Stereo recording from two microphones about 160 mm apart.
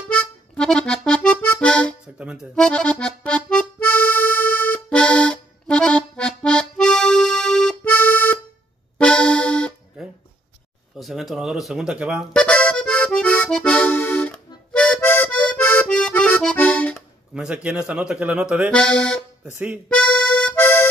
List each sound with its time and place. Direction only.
0.1 s accordion: 5° left (ahead or behind)
2.1 s speech: 5° right (ahead or behind)
2.5 s accordion: 5° left (ahead or behind)
10.0 s a sound: 5° right (ahead or behind)
11.0 s music: centre (ahead or behind)
17.3 s a man's voice: 5° right (ahead or behind)
18.7 s speech: 5° left (ahead or behind)
19.9 s accordion: 5° left (ahead or behind)